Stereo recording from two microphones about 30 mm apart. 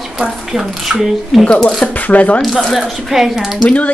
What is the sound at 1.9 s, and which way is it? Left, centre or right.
Speech, left.